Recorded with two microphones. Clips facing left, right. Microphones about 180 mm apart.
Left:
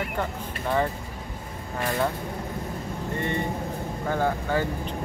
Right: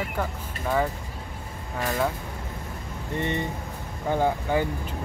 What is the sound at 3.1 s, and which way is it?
Speech, 20° right (ahead or behind).